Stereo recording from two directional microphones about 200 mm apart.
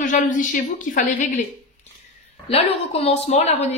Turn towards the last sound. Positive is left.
turn(degrees=30)  # may be behind; listen again after turning